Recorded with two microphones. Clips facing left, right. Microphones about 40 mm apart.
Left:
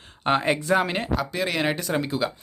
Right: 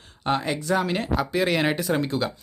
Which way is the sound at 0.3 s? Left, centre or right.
Left.